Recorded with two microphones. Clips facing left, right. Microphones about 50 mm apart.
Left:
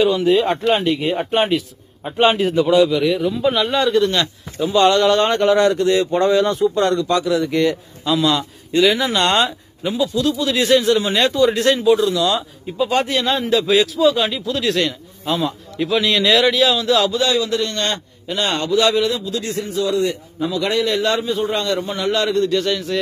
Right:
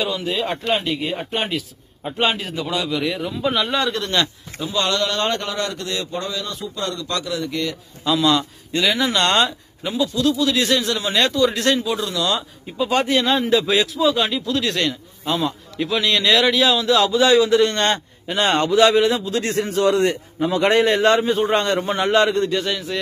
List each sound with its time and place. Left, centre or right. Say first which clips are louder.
0.0 s speech: left 8 dB; centre
6.1 s a man's voice: left 12 dB; left
7.1 s speech: left 7 dB; centre
8.0 s speech: even; centre
10.3 s speech: left 3 dB; centre
17.2 s a man's voice: right 4 dB; right
19.4 s a man's voice: right 5 dB; right
22.6 s a man's voice: left 3 dB; centre